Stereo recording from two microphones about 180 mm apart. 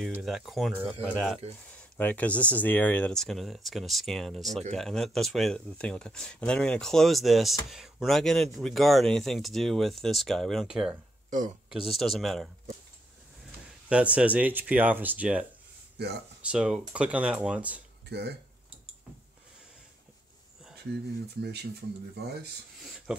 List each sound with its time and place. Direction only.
0.0 s speech: centre (ahead or behind)
11.2 s speech: 45° right (ahead or behind)
11.7 s speech: centre (ahead or behind)
13.8 s speech: 5° right (ahead or behind)
16.0 s speech: 65° right (ahead or behind)
16.4 s speech: 5° right (ahead or behind)
18.0 s speech: 65° right (ahead or behind)
21.4 s speech: 65° right (ahead or behind)
23.1 s speech: 5° right (ahead or behind)